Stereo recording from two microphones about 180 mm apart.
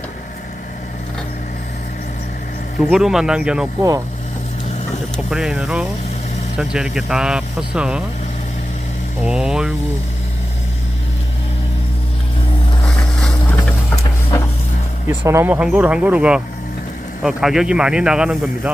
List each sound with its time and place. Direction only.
2.9 s speech: 5° right (ahead or behind)
3.8 s speech: 20° right (ahead or behind)
5.1 s speech: 5° right (ahead or behind)
9.2 s speech: 5° right (ahead or behind)
13.1 s boat: 5° left (ahead or behind)
13.9 s vehicle: 20° left (ahead or behind)
15.0 s speech: 15° right (ahead or behind)